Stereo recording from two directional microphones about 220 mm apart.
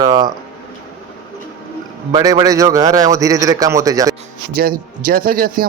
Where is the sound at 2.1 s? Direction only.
15° right (ahead or behind).